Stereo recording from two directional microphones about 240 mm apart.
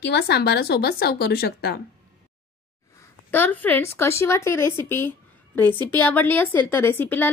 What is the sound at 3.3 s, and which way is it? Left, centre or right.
A woman's voice, centre.